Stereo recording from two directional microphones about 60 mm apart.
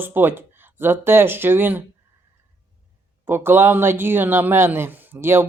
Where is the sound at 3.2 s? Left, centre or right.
Right.